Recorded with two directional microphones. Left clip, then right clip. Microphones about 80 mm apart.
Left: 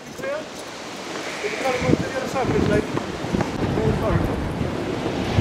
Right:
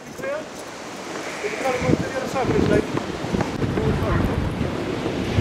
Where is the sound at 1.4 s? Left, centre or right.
Centre.